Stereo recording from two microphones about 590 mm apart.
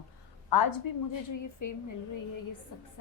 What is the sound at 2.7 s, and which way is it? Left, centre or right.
Speech, left.